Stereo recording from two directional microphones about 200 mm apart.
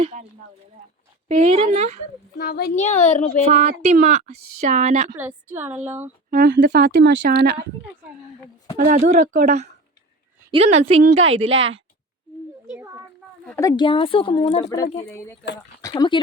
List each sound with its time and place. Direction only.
0.0 s a sound: 35° right (ahead or behind)
1.4 s a woman's voice: 30° right (ahead or behind)
2.4 s a child's voice: 55° left (ahead or behind)
2.7 s a woman's voice: 35° left (ahead or behind)
3.4 s a woman's voice: 35° right (ahead or behind)
5.2 s a woman's voice: 10° right (ahead or behind)
6.3 s speech: 45° right (ahead or behind)
8.9 s a woman's voice: 40° right (ahead or behind)
11.3 s a woman's voice: 75° right (ahead or behind)
12.7 s a sound: 15° right (ahead or behind)
13.4 s speech: 10° left (ahead or behind)
15.1 s speech: 10° left (ahead or behind)